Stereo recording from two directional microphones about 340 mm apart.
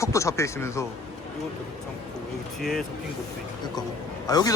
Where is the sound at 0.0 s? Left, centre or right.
Centre.